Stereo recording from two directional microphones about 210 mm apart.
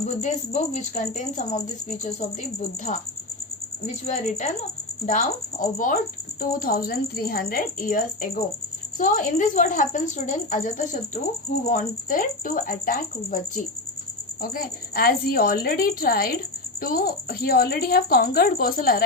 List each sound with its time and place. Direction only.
0.2 s a woman's voice: 35° left (ahead or behind)
14.4 s a woman's voice: 45° left (ahead or behind)